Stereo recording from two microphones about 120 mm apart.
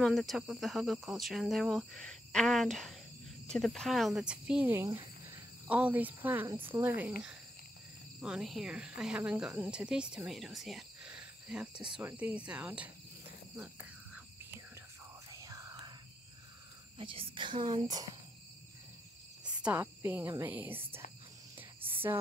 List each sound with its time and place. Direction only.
0.0 s speech: centre (ahead or behind)
15.4 s whispering: 30° right (ahead or behind)
17.0 s speech: 45° right (ahead or behind)
19.4 s speech: 10° right (ahead or behind)